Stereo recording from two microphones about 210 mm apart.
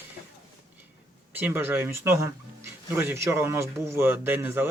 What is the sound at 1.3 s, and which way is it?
Speech, 10° right (ahead or behind).